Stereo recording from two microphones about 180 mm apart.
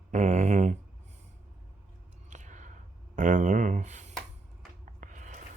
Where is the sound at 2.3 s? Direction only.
45° right (ahead or behind).